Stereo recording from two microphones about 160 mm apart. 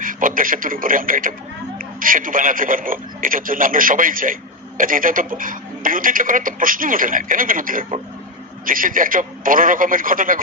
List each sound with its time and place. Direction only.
0.0 s a man's voice: 55° right (ahead or behind)